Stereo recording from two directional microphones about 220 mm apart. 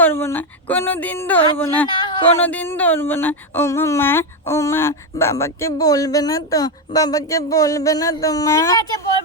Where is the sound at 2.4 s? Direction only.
10° left (ahead or behind).